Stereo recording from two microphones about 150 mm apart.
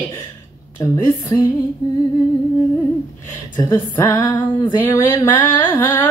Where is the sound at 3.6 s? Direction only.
15° left (ahead or behind).